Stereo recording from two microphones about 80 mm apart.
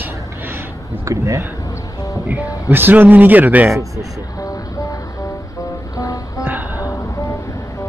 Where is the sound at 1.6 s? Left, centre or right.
Left.